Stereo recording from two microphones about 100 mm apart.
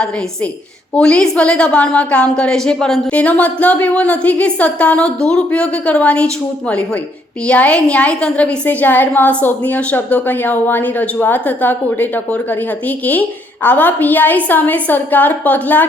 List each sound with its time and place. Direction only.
0.9 s a woman's voice: 10° left (ahead or behind)
7.4 s a woman's voice: 10° left (ahead or behind)